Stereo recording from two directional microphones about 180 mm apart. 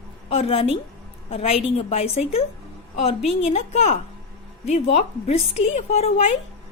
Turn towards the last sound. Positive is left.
turn(degrees=35)  # may be behind; listen again after turning